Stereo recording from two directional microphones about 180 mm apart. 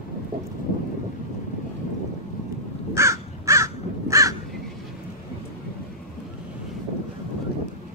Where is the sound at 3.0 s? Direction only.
15° right (ahead or behind).